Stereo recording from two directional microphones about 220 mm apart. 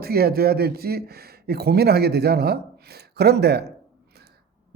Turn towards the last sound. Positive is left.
turn(degrees=-50)  # may be behind; listen again after turning